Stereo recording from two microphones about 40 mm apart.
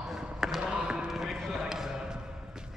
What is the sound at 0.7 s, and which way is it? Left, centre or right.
Basketball bounce, right.